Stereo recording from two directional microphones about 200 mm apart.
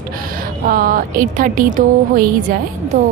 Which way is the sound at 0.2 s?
45° right (ahead or behind).